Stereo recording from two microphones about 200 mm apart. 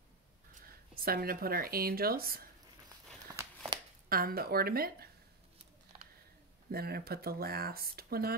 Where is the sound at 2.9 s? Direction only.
20° right (ahead or behind).